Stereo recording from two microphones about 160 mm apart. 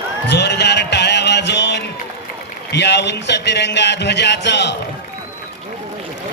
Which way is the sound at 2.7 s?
90° left.